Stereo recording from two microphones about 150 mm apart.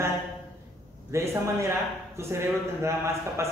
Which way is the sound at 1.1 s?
20° right (ahead or behind).